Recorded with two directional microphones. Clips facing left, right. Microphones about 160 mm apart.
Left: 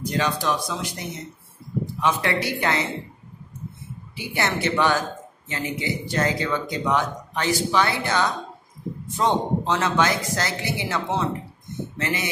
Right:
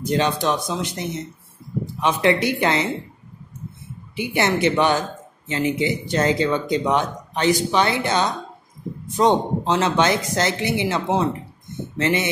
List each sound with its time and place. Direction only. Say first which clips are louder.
0.0 s speech: right 4 dB; 25° right (ahead or behind)
4.1 s speech: right 5 dB; 20° right (ahead or behind)